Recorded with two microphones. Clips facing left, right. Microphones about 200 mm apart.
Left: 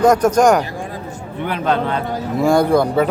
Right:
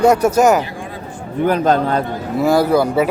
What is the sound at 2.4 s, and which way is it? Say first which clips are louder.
Speech: even; 5° right (ahead or behind).